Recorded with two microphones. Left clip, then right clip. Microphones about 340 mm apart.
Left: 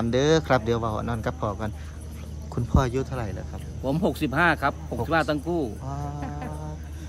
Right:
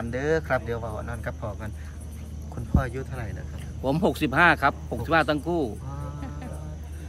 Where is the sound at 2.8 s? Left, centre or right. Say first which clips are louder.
Left 6 dB; centre.